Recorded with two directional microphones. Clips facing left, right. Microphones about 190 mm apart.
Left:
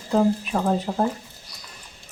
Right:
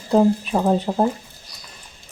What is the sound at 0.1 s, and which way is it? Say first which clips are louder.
Speech: right 4 dB; 25° right (ahead or behind).